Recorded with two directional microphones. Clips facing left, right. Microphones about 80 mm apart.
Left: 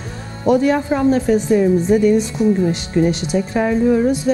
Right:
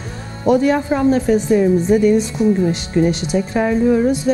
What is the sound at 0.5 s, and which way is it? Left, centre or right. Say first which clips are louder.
Speech: even; centre.